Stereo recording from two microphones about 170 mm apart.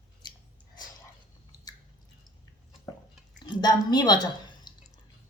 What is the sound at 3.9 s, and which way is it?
Speech, 25° left (ahead or behind).